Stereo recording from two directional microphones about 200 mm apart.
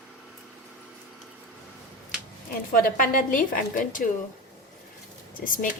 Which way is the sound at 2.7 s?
45° left (ahead or behind).